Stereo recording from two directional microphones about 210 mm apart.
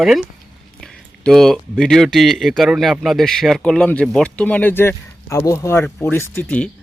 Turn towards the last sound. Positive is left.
turn(degrees=10)  # may be behind; listen again after turning